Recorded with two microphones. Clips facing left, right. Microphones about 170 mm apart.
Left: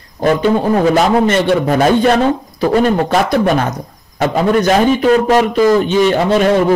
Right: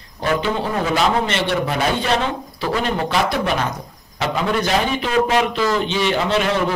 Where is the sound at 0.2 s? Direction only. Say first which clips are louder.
Left 8 dB; 45° left (ahead or behind).